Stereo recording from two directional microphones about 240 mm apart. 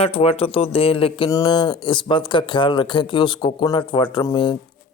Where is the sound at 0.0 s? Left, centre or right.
Left.